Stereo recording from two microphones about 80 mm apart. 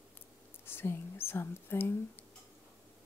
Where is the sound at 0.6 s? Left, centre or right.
Left.